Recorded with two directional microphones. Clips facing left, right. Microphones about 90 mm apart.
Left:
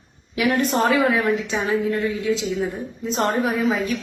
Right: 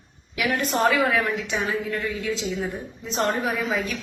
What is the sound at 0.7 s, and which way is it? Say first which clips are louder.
A woman's voice: right 1 dB; 30° left (ahead or behind).